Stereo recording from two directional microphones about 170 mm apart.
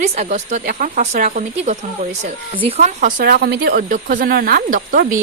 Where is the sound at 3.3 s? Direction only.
70° right (ahead or behind).